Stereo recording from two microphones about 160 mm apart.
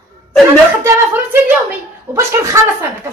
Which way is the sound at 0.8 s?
20° right (ahead or behind).